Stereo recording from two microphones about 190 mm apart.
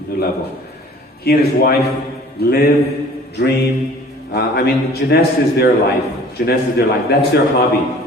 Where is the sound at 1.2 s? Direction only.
55° left (ahead or behind).